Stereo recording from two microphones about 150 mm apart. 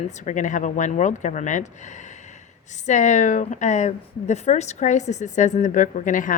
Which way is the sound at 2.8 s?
50° left (ahead or behind).